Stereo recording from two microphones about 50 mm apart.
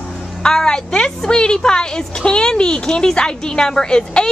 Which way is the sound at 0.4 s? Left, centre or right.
Centre.